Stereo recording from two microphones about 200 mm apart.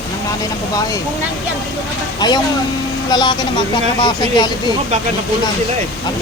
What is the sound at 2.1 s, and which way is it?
Speech, 20° left (ahead or behind).